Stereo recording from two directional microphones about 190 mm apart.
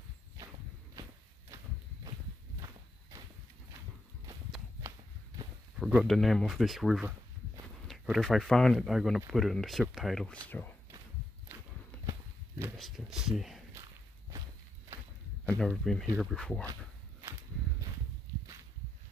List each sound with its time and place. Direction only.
5.8 s speech: 5° right (ahead or behind)
12.1 s walk: 15° right (ahead or behind)
12.7 s speech: centre (ahead or behind)
15.4 s speech: 5° left (ahead or behind)